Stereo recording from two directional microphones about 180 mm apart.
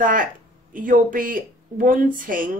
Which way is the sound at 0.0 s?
50° right (ahead or behind).